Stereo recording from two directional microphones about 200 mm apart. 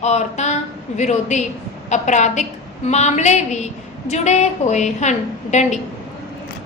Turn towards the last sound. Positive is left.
turn(degrees=35)  # may be behind; listen again after turning